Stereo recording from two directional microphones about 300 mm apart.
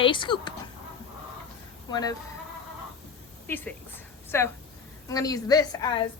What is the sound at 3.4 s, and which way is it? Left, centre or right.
A woman's voice, centre.